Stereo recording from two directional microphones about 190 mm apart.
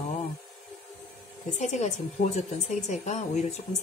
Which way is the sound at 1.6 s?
40° left (ahead or behind).